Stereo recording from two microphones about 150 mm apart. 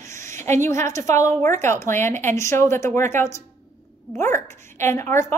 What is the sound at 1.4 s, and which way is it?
A woman's voice, 15° left (ahead or behind).